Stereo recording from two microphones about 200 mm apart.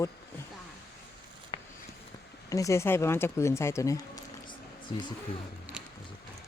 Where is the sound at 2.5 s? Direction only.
15° left (ahead or behind).